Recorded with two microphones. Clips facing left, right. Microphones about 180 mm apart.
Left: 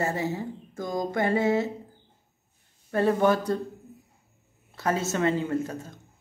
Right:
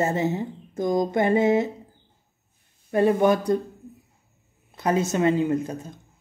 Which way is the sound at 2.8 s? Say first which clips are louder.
Right 3 dB; 15° right (ahead or behind).